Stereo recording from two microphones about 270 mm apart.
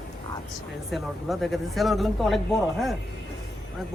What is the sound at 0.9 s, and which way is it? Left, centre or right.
Speech, centre.